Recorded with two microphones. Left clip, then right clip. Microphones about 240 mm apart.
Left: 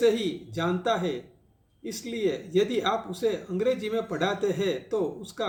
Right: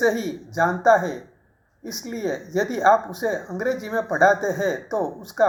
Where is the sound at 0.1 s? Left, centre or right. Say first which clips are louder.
Right 1 dB; centre.